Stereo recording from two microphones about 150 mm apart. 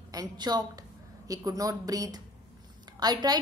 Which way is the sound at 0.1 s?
25° right (ahead or behind).